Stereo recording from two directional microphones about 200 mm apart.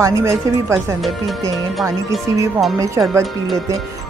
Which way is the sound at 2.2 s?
15° right (ahead or behind).